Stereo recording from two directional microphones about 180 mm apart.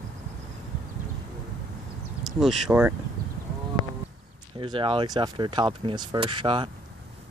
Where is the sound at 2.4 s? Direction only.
5° right (ahead or behind).